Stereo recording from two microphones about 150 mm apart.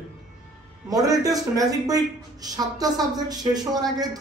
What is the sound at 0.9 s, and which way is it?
A woman's voice, 25° right (ahead or behind).